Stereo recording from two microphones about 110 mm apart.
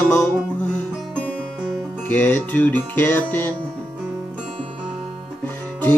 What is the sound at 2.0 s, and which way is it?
Music, 15° left (ahead or behind).